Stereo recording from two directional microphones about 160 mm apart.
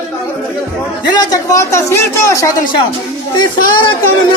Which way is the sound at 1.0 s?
25° left (ahead or behind).